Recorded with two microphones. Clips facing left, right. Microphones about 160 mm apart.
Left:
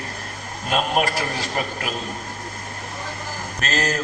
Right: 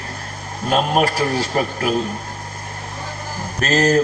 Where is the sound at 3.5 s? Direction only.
40° right (ahead or behind).